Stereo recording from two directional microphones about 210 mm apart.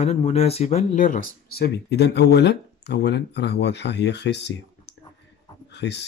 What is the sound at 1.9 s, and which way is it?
Speech, 55° left (ahead or behind).